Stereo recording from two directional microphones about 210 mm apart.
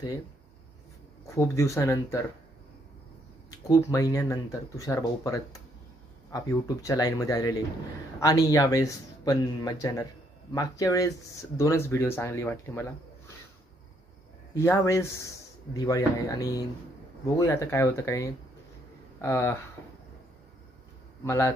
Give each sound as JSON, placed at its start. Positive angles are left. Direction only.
{"t": 1.2, "sound": "speech", "side_deg": 15}
{"t": 3.4, "sound": "speech", "side_deg": 15}
{"t": 14.5, "sound": "speech", "side_deg": 15}
{"t": 21.3, "sound": "speech", "side_deg": 15}